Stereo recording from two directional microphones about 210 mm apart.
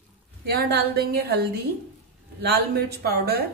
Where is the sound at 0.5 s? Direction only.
50° right (ahead or behind).